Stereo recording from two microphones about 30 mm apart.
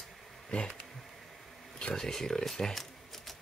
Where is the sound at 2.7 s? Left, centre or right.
Centre.